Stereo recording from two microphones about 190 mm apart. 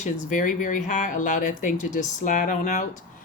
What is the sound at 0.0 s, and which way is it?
Speech, 45° left (ahead or behind).